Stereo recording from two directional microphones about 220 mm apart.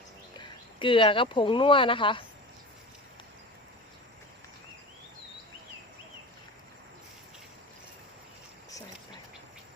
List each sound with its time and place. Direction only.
0.3 s speech: 25° left (ahead or behind)